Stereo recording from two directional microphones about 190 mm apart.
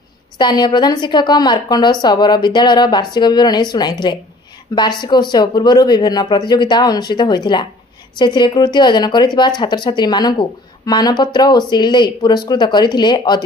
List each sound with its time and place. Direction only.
0.4 s speech: 20° left (ahead or behind)